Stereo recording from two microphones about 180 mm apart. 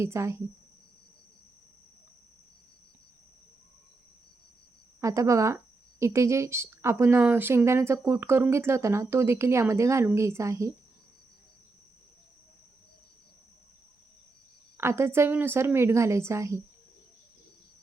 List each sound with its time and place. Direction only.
0.0 s a woman's voice: 15° right (ahead or behind)
4.9 s a woman's voice: 15° right (ahead or behind)
14.8 s a woman's voice: 15° right (ahead or behind)